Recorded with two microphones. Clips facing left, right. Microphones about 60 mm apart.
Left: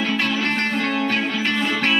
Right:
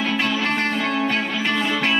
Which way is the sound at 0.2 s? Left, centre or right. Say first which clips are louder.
Even; centre.